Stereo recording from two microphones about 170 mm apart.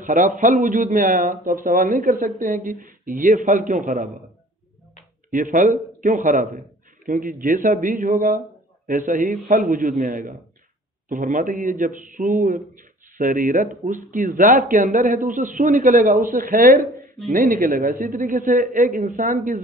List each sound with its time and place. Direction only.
0.0 s a man's voice: 50° right (ahead or behind)
5.3 s speech: 50° right (ahead or behind)